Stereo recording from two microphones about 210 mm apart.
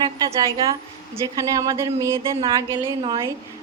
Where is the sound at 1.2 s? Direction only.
15° right (ahead or behind).